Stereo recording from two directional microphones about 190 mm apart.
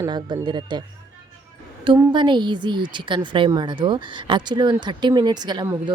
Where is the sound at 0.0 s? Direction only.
20° right (ahead or behind).